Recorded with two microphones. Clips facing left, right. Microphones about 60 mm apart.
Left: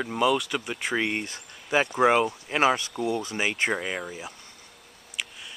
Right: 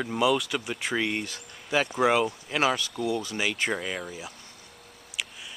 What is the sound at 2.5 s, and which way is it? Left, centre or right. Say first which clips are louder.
Speech: left 4 dB; left.